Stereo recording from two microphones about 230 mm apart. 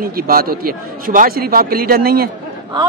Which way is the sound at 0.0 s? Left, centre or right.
Right.